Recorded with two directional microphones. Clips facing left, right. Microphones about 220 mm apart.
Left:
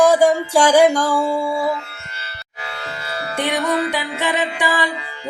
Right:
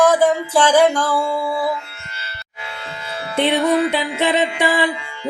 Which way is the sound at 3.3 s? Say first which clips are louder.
Right 4 dB; 20° right (ahead or behind).